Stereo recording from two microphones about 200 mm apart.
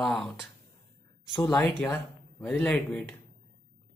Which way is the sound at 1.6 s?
10° left (ahead or behind).